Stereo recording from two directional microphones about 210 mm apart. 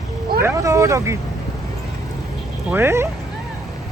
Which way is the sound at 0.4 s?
15° right (ahead or behind).